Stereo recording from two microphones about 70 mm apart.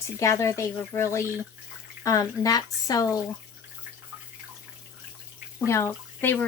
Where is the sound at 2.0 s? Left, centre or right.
Left.